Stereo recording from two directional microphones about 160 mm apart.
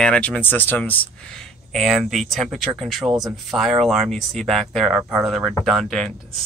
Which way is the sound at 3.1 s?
25° right (ahead or behind).